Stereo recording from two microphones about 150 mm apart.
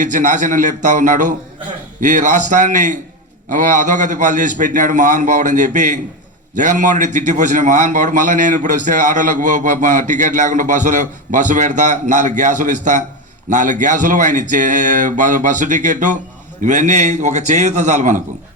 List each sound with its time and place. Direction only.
0.0 s a man's voice: 60° right (ahead or behind)